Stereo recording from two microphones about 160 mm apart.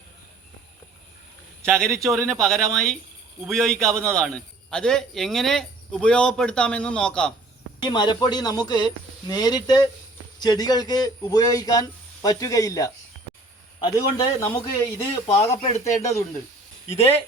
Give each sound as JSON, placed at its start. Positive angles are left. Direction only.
{"t": 1.7, "sound": "a man's voice", "side_deg": 5}
{"t": 7.8, "sound": "speech", "side_deg": 25}
{"t": 15.4, "sound": "speech", "side_deg": 40}